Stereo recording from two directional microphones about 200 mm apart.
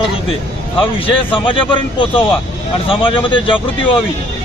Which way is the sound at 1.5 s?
25° left (ahead or behind).